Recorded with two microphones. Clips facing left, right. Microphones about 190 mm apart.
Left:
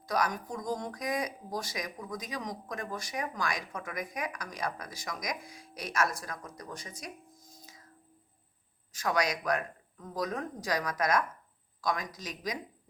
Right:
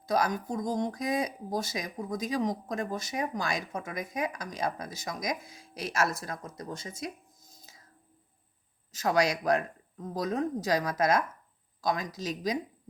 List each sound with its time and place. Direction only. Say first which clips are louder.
0.1 s speech: right 3 dB; 25° right (ahead or behind)
8.9 s speech: right 4 dB; 25° right (ahead or behind)